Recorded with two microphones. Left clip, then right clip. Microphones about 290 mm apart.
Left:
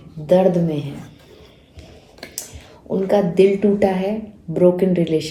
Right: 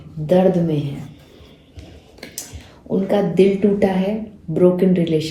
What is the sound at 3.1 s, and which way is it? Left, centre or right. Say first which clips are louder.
A man's voice: left 1 dB; left.